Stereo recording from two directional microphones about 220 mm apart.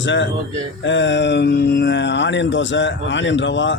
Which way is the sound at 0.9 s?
55° left (ahead or behind).